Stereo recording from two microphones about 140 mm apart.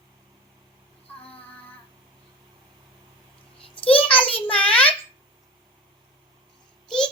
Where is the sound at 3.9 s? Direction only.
10° left (ahead or behind).